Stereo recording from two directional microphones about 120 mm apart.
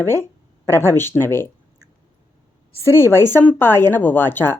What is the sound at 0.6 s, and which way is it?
Speech, 20° left (ahead or behind).